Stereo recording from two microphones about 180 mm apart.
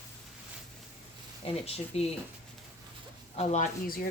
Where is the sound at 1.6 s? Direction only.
35° left (ahead or behind).